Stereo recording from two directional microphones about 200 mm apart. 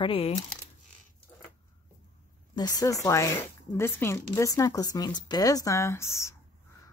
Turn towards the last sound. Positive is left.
turn(degrees=15)  # may be behind; listen again after turning